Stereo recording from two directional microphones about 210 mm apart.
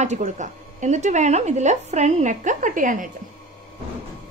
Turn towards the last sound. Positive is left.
turn(degrees=-40)  # may be behind; listen again after turning